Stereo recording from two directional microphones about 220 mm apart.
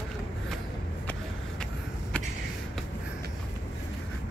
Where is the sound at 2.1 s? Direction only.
5° left (ahead or behind).